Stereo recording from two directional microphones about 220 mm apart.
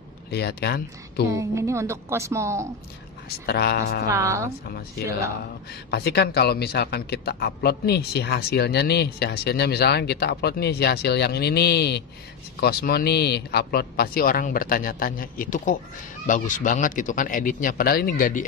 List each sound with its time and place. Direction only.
0.3 s a man's voice: 45° left (ahead or behind)
1.3 s a woman's voice: 15° right (ahead or behind)
3.4 s a man's voice: 45° left (ahead or behind)
4.1 s a woman's voice: 15° right (ahead or behind)
4.6 s a man's voice: 45° left (ahead or behind)